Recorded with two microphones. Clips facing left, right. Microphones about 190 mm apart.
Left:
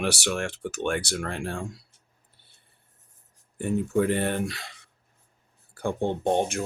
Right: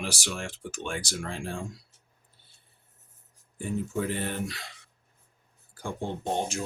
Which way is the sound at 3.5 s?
65° left (ahead or behind).